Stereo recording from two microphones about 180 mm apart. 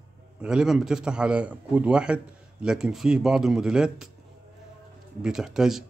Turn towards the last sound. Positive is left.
turn(degrees=-5)  # may be behind; listen again after turning